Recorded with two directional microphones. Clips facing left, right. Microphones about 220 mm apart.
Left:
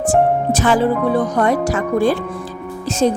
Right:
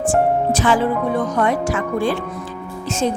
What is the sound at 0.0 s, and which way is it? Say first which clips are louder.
Speech: left 2 dB; 40° left (ahead or behind).